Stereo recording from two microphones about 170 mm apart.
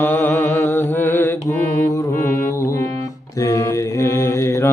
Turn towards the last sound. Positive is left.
turn(degrees=15)  # may be behind; listen again after turning